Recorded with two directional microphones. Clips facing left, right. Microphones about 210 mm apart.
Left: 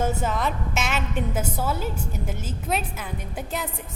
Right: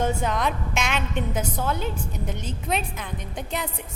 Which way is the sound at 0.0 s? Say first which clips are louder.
Right 1 dB; 5° left (ahead or behind).